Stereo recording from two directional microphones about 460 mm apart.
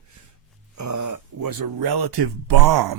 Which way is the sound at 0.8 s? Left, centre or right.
Right.